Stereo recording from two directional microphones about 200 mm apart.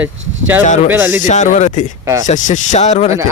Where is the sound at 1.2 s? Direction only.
40° left (ahead or behind).